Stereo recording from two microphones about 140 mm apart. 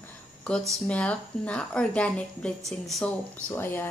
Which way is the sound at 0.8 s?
10° left (ahead or behind).